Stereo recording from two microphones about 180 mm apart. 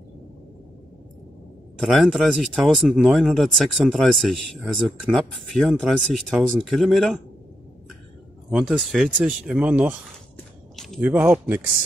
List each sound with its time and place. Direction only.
1.8 s speech: centre (ahead or behind)
8.5 s speech: 5° right (ahead or behind)
10.3 s a sound: centre (ahead or behind)